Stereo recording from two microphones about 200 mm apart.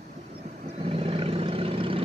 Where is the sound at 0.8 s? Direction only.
30° right (ahead or behind).